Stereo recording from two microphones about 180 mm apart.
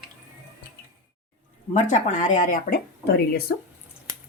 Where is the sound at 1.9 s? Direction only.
45° left (ahead or behind); by 3.4 s 60° left (ahead or behind).